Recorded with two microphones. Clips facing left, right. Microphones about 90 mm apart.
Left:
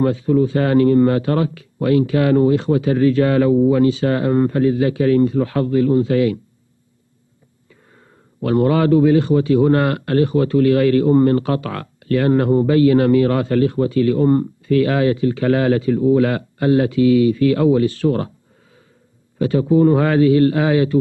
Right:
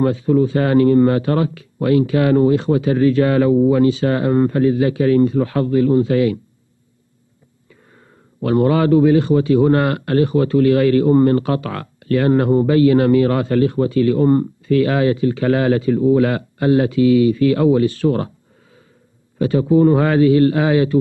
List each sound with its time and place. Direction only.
0.0 s a man's voice: 30° right (ahead or behind)
8.4 s a man's voice: 30° right (ahead or behind)
19.3 s a man's voice: 30° right (ahead or behind)